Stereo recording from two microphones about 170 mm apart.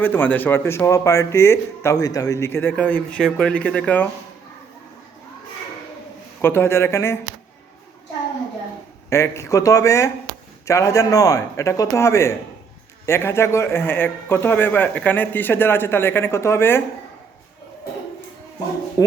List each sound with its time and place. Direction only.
0.0 s a man's voice: 10° left (ahead or behind)
6.4 s a man's voice: 15° left (ahead or behind)
9.0 s a man's voice: 15° left (ahead or behind)
19.0 s a sound: 20° left (ahead or behind)